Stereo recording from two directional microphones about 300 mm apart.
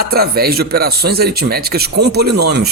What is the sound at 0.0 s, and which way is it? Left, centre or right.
A man's voice, right.